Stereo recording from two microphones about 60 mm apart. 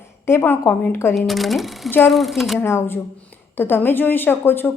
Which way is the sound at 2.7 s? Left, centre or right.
Left.